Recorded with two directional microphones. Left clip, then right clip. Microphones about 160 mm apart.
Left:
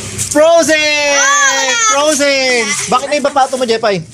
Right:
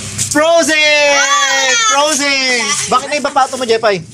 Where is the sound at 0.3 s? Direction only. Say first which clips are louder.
Left 2 dB; 20° left (ahead or behind).